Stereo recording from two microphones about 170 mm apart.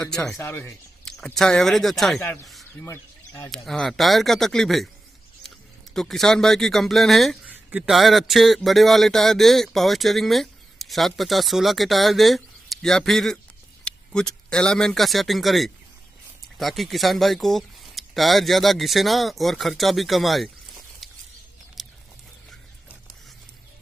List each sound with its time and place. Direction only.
0.0 s speech: 5° left (ahead or behind)
0.4 s speech: 15° left (ahead or behind)
1.1 s speech: centre (ahead or behind)
2.8 s speech: 20° left (ahead or behind)
3.5 s speech: centre (ahead or behind)
5.9 s speech: centre (ahead or behind)
13.9 s a sound: 5° left (ahead or behind)
14.5 s speech: 5° left (ahead or behind)
21.8 s a sound: centre (ahead or behind)